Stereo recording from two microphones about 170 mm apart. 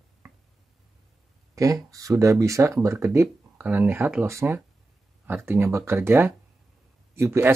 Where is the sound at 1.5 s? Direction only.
20° right (ahead or behind).